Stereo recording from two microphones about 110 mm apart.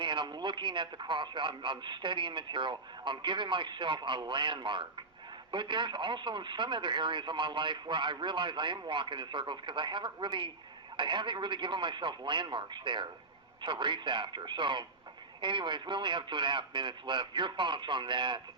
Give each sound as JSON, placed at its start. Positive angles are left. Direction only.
{"t": 0.0, "sound": "speech", "side_deg": -45}